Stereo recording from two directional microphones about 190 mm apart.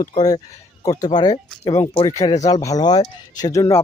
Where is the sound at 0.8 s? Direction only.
20° left (ahead or behind).